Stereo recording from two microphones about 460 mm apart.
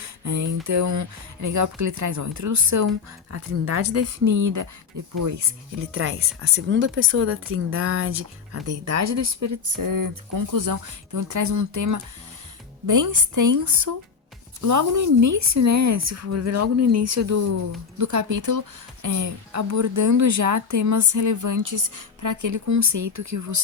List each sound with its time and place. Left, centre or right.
0.0 s speech: right
5.8 s speech: right